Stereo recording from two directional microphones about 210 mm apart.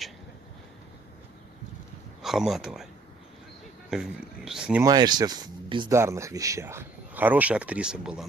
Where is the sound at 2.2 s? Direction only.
Centre (ahead or behind).